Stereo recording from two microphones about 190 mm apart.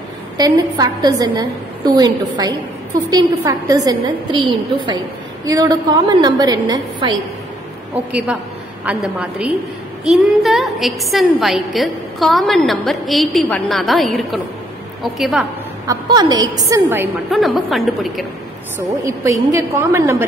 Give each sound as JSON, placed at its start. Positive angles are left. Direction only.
{"t": 0.4, "sound": "a woman's voice", "side_deg": -20}
{"t": 7.9, "sound": "a woman's voice", "side_deg": -5}
{"t": 15.9, "sound": "a woman's voice", "side_deg": -20}
{"t": 17.3, "sound": "a woman's voice", "side_deg": 0}
{"t": 19.0, "sound": "a woman's voice", "side_deg": -15}